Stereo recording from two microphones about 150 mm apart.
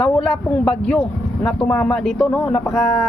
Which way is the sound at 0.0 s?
5° left (ahead or behind).